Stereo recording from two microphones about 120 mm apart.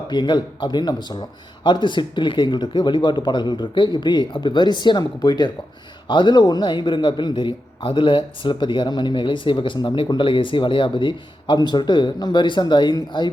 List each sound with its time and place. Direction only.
0.1 s a man's voice: 40° left (ahead or behind)